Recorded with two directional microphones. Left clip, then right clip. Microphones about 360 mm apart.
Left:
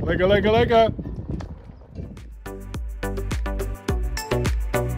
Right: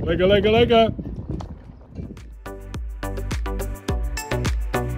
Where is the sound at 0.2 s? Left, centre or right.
Centre.